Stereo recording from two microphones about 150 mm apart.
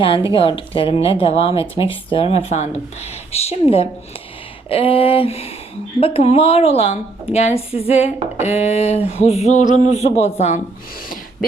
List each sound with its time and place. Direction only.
0.3 s speech: 35° left (ahead or behind)